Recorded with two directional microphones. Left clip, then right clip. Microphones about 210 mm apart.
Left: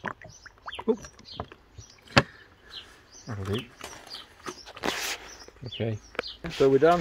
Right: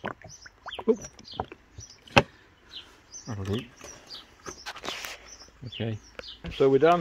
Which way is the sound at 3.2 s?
5° right (ahead or behind).